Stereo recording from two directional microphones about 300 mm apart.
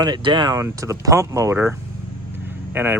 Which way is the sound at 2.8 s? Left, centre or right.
Centre.